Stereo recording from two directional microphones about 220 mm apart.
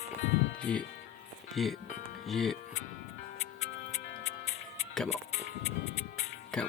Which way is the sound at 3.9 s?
30° left (ahead or behind).